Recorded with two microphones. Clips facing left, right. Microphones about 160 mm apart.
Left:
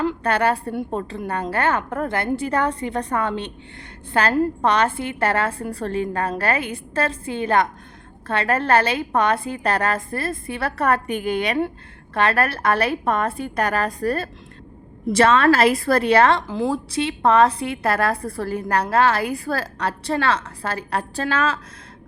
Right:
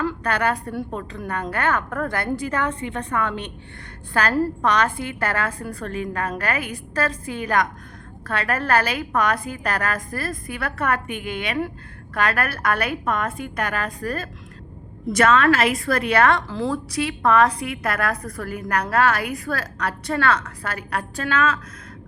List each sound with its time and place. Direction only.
0.0 s a woman's voice: 30° left (ahead or behind)